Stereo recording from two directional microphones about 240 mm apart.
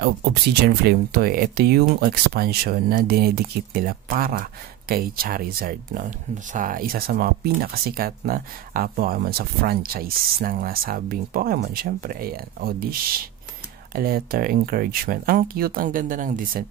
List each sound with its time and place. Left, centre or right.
0.0 s speech: right